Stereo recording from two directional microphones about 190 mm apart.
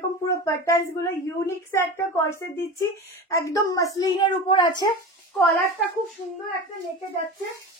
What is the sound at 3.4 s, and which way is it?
A child's voice, 15° left (ahead or behind).